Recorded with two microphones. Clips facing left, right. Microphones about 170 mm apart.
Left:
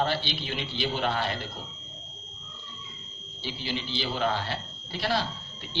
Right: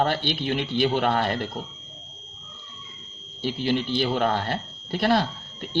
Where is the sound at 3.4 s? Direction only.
55° right (ahead or behind).